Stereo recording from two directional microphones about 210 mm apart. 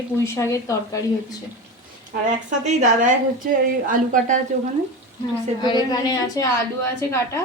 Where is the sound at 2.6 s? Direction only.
35° right (ahead or behind).